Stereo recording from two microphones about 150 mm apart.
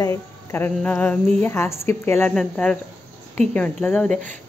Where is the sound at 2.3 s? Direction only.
5° left (ahead or behind).